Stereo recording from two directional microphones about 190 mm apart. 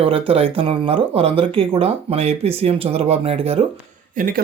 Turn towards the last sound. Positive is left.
turn(degrees=-45)  # may be behind; listen again after turning